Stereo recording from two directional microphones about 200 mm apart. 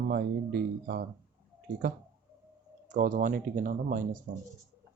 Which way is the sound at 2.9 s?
40° right (ahead or behind).